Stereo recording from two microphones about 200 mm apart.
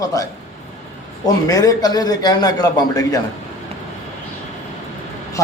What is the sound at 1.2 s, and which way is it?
A man's voice, 20° left (ahead or behind).